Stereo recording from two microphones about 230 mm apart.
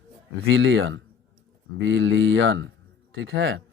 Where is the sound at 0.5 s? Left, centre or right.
Right.